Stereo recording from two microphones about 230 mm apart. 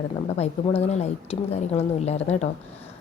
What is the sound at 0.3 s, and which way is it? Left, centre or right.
A woman's voice, left.